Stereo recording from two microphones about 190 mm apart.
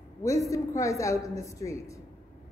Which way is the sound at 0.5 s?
15° left (ahead or behind).